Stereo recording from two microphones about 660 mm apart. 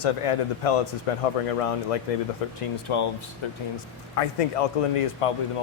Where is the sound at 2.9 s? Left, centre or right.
Left.